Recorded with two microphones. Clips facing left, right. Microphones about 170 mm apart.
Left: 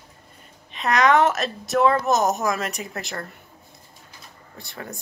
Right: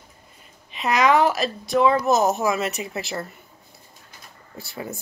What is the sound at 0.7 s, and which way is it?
A woman's voice, centre (ahead or behind).